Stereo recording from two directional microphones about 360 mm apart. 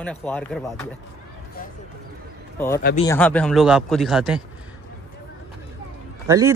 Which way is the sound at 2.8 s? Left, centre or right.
Centre.